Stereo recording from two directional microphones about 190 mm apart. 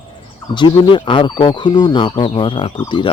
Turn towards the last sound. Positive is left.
turn(degrees=25)  # may be behind; listen again after turning